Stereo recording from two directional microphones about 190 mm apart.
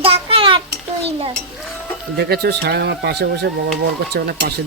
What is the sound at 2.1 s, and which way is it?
Speech, 55° right (ahead or behind).